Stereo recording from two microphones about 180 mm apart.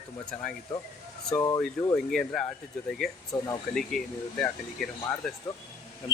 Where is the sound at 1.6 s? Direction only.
10° left (ahead or behind).